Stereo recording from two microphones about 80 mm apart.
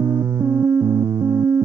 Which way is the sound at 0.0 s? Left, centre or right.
Right.